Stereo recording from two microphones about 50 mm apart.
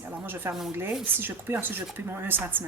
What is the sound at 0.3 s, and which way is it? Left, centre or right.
Speech, right.